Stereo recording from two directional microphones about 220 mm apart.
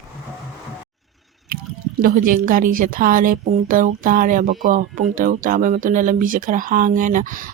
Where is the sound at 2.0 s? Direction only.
40° right (ahead or behind).